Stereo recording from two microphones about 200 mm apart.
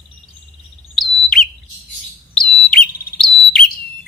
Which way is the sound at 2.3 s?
5° left (ahead or behind).